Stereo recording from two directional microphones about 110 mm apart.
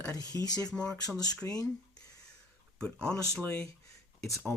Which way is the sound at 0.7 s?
5° left (ahead or behind).